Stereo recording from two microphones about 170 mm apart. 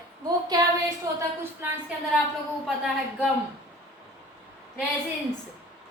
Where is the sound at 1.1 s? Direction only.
20° right (ahead or behind).